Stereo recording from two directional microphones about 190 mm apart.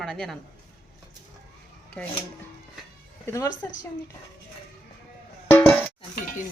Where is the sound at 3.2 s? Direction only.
15° left (ahead or behind).